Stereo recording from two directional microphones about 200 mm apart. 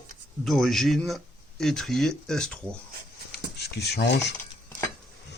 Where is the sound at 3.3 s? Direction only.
55° left (ahead or behind).